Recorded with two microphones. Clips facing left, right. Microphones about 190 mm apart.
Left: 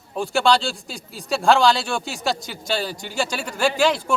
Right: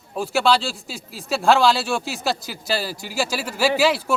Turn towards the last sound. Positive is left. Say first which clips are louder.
# right 1 dB
turn(degrees=-5)  # may be behind; listen again after turning